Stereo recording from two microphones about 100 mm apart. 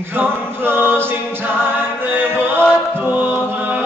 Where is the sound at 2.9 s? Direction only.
20° right (ahead or behind).